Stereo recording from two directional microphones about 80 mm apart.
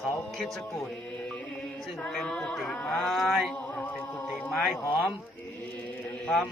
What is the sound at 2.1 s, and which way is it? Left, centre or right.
A man's voice, centre.